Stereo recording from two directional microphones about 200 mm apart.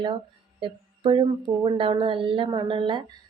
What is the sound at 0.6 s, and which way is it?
A woman's voice, 25° right (ahead or behind).